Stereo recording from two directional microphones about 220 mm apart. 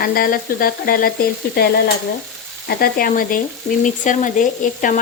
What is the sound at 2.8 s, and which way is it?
Frying, 40° left (ahead or behind).